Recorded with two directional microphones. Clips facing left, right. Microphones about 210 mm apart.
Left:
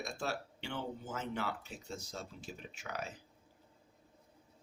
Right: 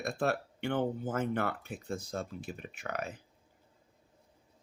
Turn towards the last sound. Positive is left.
turn(degrees=-55)  # may be behind; listen again after turning